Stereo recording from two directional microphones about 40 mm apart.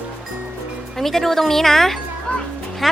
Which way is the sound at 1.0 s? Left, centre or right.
Centre.